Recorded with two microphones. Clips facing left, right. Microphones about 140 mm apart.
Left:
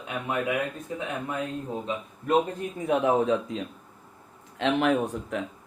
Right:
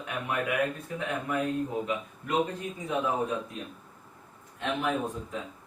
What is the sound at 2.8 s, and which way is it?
Speech, 85° left.